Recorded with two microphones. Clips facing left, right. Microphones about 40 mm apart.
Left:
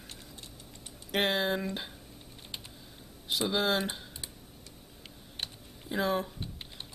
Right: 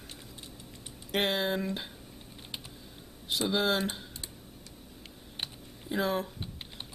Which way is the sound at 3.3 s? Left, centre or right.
Centre.